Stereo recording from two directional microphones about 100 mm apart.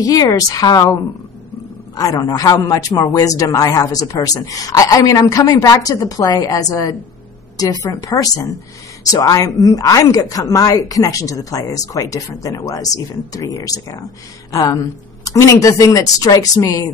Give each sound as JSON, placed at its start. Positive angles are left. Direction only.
{"t": 0.0, "sound": "speech", "side_deg": 35}